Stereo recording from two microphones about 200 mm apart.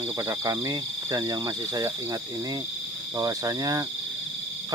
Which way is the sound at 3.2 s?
20° right (ahead or behind).